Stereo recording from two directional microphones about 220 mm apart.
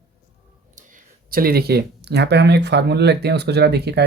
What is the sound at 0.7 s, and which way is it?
Speech, 40° right (ahead or behind).